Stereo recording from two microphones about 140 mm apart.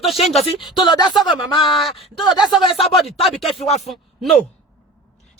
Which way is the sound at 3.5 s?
50° left (ahead or behind).